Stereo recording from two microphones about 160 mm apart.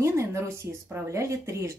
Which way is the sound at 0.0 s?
20° right (ahead or behind).